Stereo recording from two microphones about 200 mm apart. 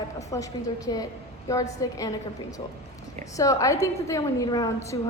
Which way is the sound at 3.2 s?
15° left (ahead or behind).